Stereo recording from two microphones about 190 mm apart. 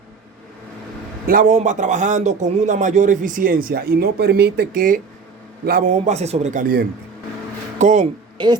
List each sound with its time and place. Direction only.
1.3 s a man's voice: 45° right (ahead or behind)
8.4 s a woman's voice: 25° right (ahead or behind)